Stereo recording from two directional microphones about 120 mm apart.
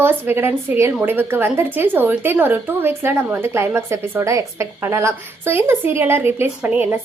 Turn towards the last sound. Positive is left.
turn(degrees=-15)  # may be behind; listen again after turning